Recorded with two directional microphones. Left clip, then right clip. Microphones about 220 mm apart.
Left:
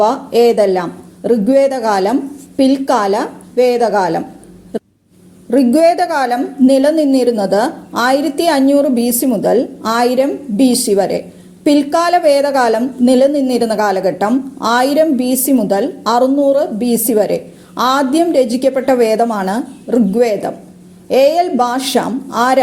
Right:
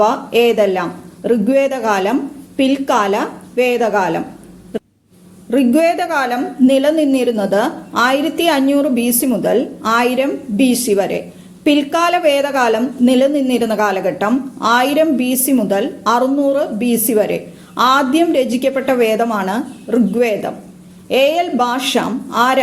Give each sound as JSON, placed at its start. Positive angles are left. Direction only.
{"t": 0.0, "sound": "a woman's voice", "side_deg": 30}
{"t": 5.5, "sound": "a woman's voice", "side_deg": 30}